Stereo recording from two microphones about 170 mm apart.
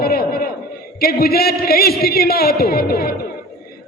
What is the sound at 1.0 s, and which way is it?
A man's voice, 65° left (ahead or behind).